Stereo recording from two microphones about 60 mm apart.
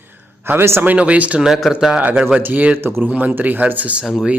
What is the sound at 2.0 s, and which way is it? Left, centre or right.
Speech, right.